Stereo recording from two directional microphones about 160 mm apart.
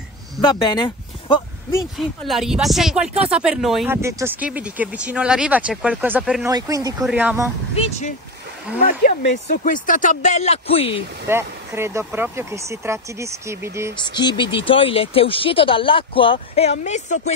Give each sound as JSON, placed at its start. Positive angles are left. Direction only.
{"t": 0.4, "sound": "speech", "side_deg": 30}
{"t": 1.8, "sound": "speech", "side_deg": 0}
{"t": 3.8, "sound": "speech", "side_deg": -15}
{"t": 6.4, "sound": "speech", "side_deg": -20}
{"t": 7.1, "sound": "speech", "side_deg": -10}
{"t": 7.7, "sound": "speech", "side_deg": 40}
{"t": 8.8, "sound": "speech", "side_deg": 55}
{"t": 11.2, "sound": "speech", "side_deg": -15}
{"t": 13.9, "sound": "speech", "side_deg": 30}